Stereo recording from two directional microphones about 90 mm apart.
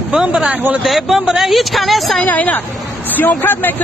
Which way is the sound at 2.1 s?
15° left (ahead or behind).